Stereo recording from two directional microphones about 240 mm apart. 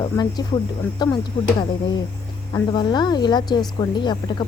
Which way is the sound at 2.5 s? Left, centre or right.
Centre.